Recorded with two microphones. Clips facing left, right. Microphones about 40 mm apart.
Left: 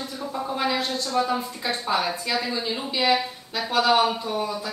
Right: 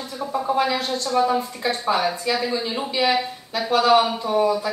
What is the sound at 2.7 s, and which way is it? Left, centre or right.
Speech, centre.